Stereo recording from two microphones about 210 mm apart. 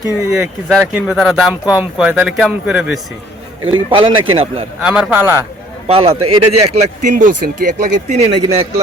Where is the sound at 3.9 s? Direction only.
25° right (ahead or behind).